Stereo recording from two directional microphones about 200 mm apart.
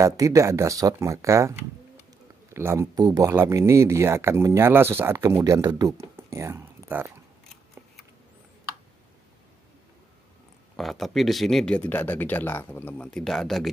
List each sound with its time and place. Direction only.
0.0 s speech: 15° right (ahead or behind)
2.5 s speech: 15° right (ahead or behind)
10.8 s speech: centre (ahead or behind)